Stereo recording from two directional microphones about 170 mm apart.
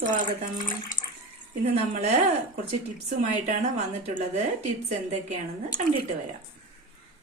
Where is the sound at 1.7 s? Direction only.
40° right (ahead or behind).